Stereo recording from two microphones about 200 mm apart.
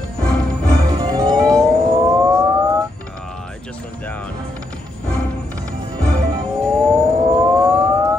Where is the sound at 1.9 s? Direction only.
15° right (ahead or behind).